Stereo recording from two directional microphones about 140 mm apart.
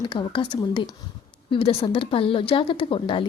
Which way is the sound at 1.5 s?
45° left (ahead or behind).